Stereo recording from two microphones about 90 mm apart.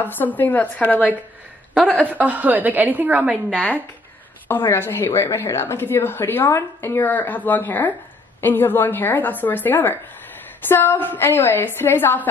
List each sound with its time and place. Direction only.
0.0 s speech: 20° left (ahead or behind)
2.0 s a woman's voice: 20° right (ahead or behind)
3.5 s speech: 15° left (ahead or behind)